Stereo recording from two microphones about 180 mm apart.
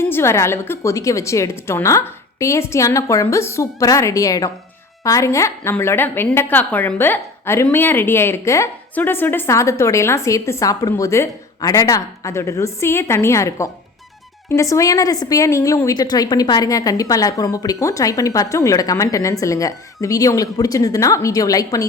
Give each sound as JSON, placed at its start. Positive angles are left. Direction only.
{"t": 0.0, "sound": "a woman's voice", "side_deg": 15}